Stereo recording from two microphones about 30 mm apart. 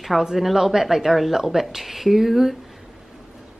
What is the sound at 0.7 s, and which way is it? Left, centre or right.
A woman's voice, centre.